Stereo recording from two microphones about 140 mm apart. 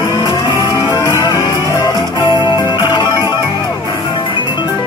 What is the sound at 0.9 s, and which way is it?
Music, 25° left (ahead or behind).